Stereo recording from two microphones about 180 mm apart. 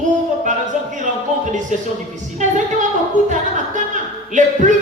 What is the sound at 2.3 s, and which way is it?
A woman's voice, 45° right (ahead or behind).